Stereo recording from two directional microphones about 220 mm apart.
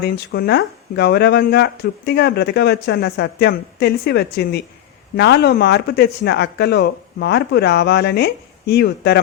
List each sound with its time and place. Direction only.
0.0 s speech: 45° left (ahead or behind)